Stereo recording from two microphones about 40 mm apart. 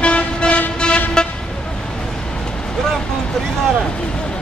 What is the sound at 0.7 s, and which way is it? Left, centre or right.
Vehicle, left.